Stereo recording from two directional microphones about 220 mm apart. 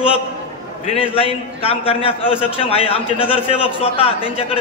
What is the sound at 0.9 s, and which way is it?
A man's voice, 25° left (ahead or behind).